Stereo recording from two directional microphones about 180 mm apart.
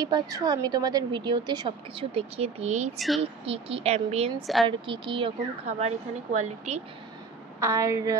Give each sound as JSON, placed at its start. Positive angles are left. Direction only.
{"t": 0.0, "sound": "a woman's voice", "side_deg": -20}
{"t": 4.4, "sound": "a woman's voice", "side_deg": 0}
{"t": 4.6, "sound": "a woman's voice", "side_deg": -30}
{"t": 7.6, "sound": "a woman's voice", "side_deg": -15}